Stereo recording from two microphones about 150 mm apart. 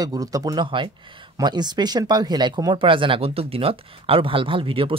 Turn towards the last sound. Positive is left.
turn(degrees=-35)  # may be behind; listen again after turning